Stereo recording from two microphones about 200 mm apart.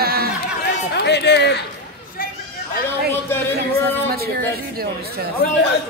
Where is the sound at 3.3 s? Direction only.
10° left (ahead or behind).